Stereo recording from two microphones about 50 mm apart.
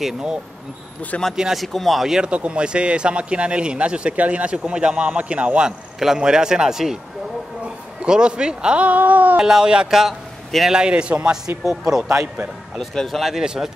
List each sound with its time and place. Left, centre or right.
0.0 s a man's voice: centre
1.6 s speech: centre
2.0 s a man's voice: centre
2.3 s a man's voice: right
5.9 s a man's voice: centre
7.6 s a man's voice: centre
8.8 s a sound: right
9.4 s a man's voice: centre
9.8 s a man's voice: centre
10.7 s a man's voice: centre
11.6 s a man's voice: centre
12.9 s speech: centre
13.4 s a man's voice: centre